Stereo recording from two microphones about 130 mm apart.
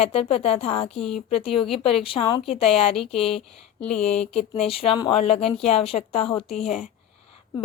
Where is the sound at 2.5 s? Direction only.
Centre (ahead or behind).